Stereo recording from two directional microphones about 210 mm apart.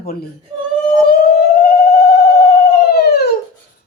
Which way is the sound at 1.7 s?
45° left (ahead or behind).